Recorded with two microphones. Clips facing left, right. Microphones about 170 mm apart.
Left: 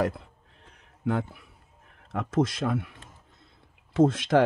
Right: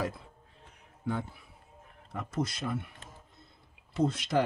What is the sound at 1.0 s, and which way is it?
Speech, 75° left (ahead or behind).